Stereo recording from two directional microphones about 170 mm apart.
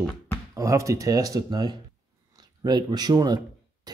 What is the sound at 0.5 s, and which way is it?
Speech, 20° right (ahead or behind).